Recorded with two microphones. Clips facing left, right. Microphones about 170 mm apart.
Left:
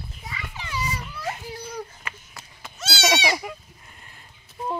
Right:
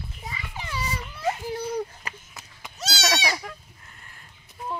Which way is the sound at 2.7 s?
35° right (ahead or behind).